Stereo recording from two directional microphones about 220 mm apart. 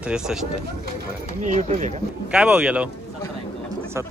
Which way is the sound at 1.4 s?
30° right (ahead or behind).